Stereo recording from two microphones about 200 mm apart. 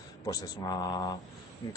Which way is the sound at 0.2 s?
20° left (ahead or behind).